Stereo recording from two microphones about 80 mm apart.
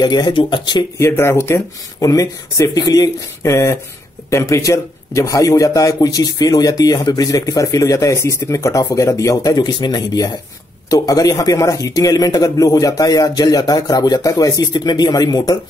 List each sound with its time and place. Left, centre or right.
0.0 s speech: left
0.9 s a man's voice: left
10.9 s a man's voice: left